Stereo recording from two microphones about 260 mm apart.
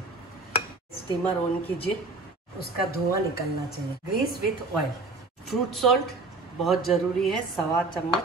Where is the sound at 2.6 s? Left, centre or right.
Left.